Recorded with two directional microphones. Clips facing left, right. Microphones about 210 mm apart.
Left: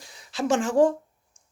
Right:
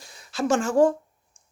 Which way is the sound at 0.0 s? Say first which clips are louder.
Right 1 dB; 15° left (ahead or behind).